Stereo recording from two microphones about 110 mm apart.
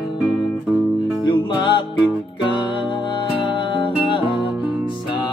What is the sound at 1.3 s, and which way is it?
Music, 45° left (ahead or behind).